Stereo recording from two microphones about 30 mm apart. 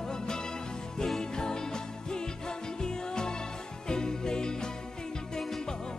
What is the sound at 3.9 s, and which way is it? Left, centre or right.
Music, left.